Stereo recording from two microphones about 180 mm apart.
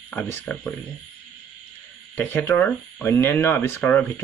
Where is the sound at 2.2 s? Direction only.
10° left (ahead or behind).